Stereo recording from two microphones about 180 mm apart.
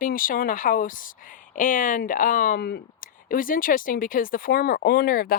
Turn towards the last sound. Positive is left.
turn(degrees=55)  # may be behind; listen again after turning